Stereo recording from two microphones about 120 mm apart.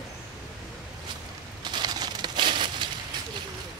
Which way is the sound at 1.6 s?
35° right (ahead or behind).